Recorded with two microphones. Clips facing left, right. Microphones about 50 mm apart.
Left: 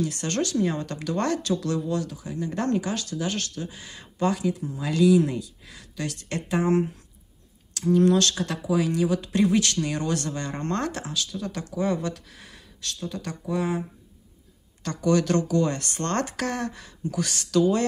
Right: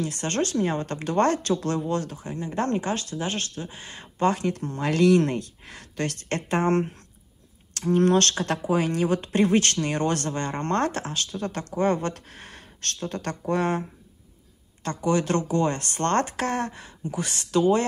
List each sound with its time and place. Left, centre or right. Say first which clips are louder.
0.0 s speech: even; right
4.5 s speech: right 2 dB; right
14.8 s speech: left 1 dB; right